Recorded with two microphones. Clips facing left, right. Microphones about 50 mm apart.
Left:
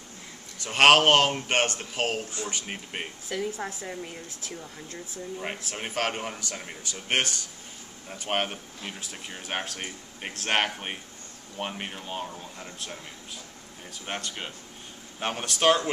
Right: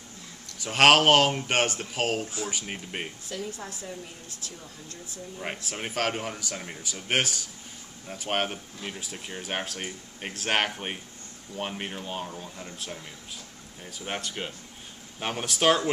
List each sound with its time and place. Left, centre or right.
0.7 s speech: centre
3.3 s a woman's voice: left
5.4 s speech: centre
14.0 s speech: centre